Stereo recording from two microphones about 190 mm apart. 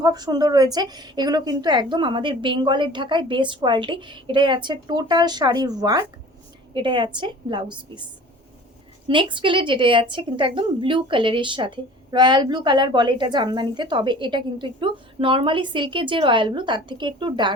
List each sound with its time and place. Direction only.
0.0 s speech: 20° right (ahead or behind)
9.0 s speech: 25° right (ahead or behind)